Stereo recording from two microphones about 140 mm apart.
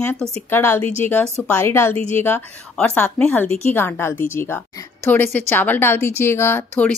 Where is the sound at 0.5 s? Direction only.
15° left (ahead or behind).